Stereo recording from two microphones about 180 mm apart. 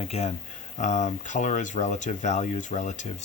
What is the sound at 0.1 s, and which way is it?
Speech, 35° left (ahead or behind).